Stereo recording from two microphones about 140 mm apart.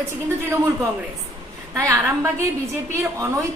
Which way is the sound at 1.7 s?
20° right (ahead or behind).